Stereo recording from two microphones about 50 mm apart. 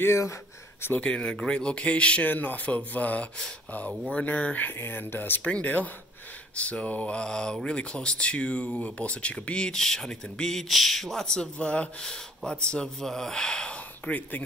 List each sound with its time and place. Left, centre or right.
0.0 s speech: left
0.9 s speech: left
2.2 s speech: left
4.7 s speech: left
5.5 s speech: left
12.0 s speech: centre
14.0 s speech: left